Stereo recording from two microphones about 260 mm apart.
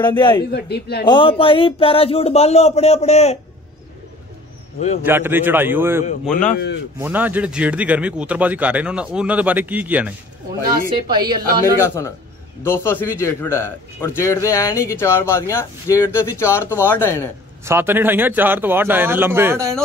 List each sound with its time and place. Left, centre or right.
0.0 s a man's voice: centre
0.5 s a man's voice: left
1.0 s speech: centre
4.7 s speech: left
5.0 s a man's voice: centre
6.5 s a man's voice: left
7.0 s a man's voice: centre
11.1 s a man's voice: centre
11.8 s a man's voice: centre
17.6 s a man's voice: centre